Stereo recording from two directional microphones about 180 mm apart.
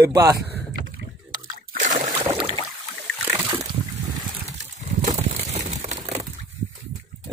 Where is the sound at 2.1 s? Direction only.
25° right (ahead or behind).